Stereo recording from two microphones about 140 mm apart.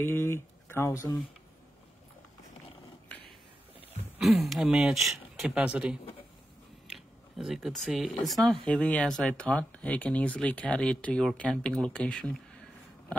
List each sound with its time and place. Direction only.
0.0 s speech: 15° left (ahead or behind)
4.2 s speech: centre (ahead or behind)